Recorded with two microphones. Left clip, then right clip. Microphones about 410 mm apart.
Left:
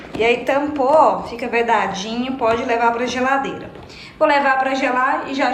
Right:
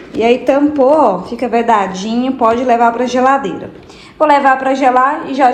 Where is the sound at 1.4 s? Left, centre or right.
Centre.